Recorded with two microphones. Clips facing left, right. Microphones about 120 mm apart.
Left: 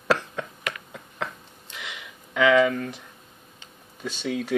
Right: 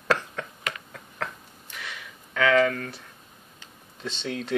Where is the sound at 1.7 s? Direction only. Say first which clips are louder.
Left 1 dB; 15° left (ahead or behind).